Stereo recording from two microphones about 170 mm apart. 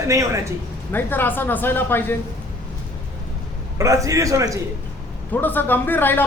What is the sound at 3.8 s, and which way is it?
Speech, 20° right (ahead or behind).